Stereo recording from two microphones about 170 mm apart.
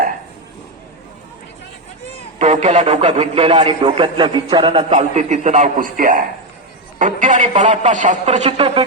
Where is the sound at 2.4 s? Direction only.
45° right (ahead or behind); by 4.8 s 30° right (ahead or behind).